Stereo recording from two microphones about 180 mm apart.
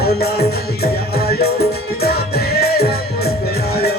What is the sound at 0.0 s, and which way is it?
Music, 60° left (ahead or behind).